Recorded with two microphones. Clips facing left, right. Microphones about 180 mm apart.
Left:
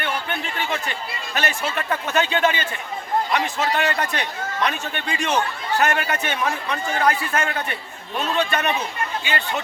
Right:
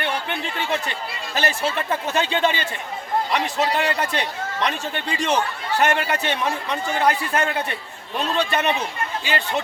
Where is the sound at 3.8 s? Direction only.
30° right (ahead or behind).